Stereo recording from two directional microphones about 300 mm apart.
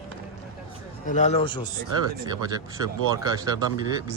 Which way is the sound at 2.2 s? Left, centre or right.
Centre.